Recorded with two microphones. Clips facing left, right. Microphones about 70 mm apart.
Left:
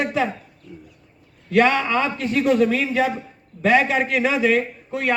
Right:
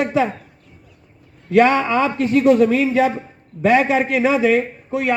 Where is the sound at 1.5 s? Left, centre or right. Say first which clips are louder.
Right 3 dB; right.